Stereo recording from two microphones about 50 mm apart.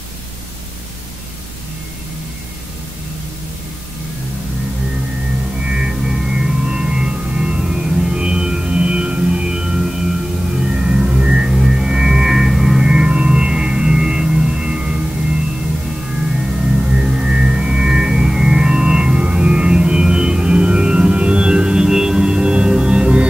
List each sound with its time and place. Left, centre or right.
5.6 s chirp tone: centre
10.6 s music: centre
12.9 s chirp tone: right
16.8 s music: right